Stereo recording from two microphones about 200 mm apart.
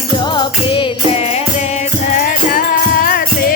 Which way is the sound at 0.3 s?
25° left (ahead or behind).